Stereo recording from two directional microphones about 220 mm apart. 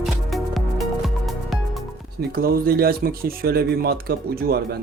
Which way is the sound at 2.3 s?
45° right (ahead or behind).